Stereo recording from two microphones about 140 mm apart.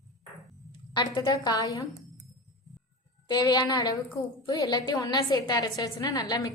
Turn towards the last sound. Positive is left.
turn(degrees=30)  # may be behind; listen again after turning